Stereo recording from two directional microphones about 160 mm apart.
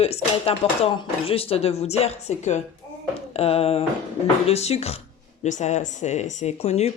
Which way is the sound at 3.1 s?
40° left (ahead or behind).